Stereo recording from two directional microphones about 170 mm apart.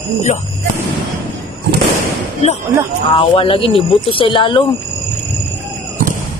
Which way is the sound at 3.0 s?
30° left (ahead or behind).